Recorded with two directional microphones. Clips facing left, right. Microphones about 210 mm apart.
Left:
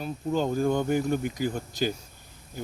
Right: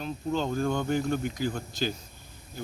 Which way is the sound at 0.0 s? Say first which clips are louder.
Left 2 dB; 10° left (ahead or behind).